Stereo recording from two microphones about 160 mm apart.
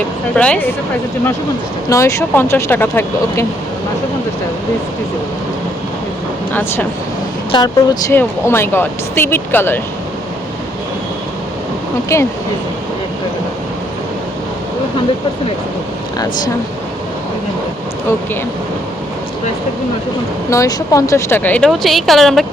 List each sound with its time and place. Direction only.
0.3 s a woman's voice: 5° left (ahead or behind)
1.9 s a woman's voice: 20° left (ahead or behind)
6.5 s a woman's voice: 10° left (ahead or behind)
7.5 s speech: 25° left (ahead or behind)
8.1 s a woman's voice: 15° left (ahead or behind)
12.1 s a woman's voice: 15° left (ahead or behind)
20.5 s a woman's voice: 20° left (ahead or behind); by 22.4 s centre (ahead or behind)